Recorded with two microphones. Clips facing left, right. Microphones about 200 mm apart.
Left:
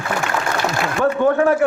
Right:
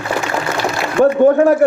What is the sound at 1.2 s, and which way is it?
Speech, 40° right (ahead or behind).